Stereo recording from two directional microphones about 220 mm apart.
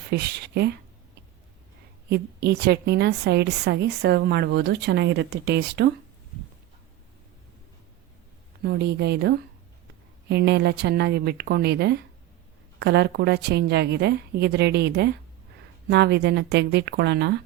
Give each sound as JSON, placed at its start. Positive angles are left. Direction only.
{"t": 0.1, "sound": "a woman's voice", "side_deg": -45}
{"t": 2.0, "sound": "a woman's voice", "side_deg": -45}
{"t": 8.6, "sound": "a woman's voice", "side_deg": -50}